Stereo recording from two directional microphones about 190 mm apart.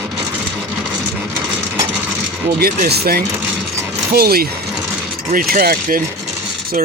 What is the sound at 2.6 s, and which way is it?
Speech, 55° right (ahead or behind).